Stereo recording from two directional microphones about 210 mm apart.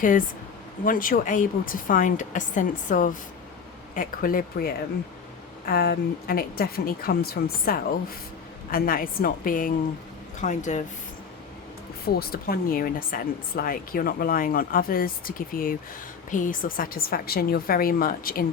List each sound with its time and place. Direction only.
0.9 s a woman's voice: 40° left (ahead or behind)
12.0 s a woman's voice: 45° left (ahead or behind)